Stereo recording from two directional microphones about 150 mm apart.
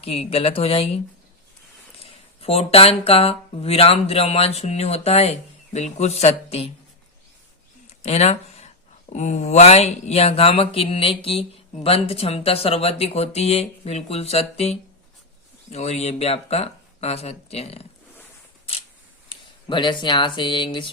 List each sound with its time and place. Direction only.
0.0 s speech: 40° left (ahead or behind)
2.0 s speech: 40° left (ahead or behind)
8.0 s speech: 45° left (ahead or behind)
19.3 s speech: 30° left (ahead or behind)